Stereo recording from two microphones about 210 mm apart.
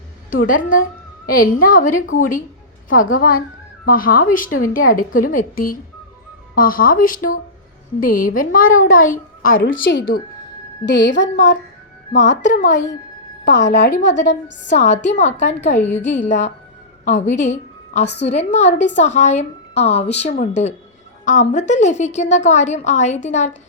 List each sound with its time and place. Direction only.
0.4 s a woman's voice: 40° left (ahead or behind)
9.6 s a woman's voice: 65° left (ahead or behind)
12.1 s a woman's voice: 35° left (ahead or behind)
13.4 s a woman's voice: 55° left (ahead or behind)
14.7 s a woman's voice: 35° left (ahead or behind)
18.0 s a woman's voice: 55° left (ahead or behind)
18.3 s a woman's voice: 30° left (ahead or behind)